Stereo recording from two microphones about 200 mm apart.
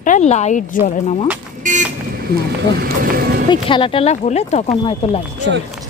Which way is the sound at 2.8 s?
50° right (ahead or behind).